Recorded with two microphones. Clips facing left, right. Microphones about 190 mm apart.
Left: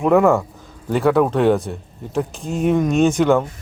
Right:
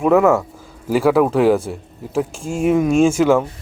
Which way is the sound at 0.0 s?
5° right (ahead or behind).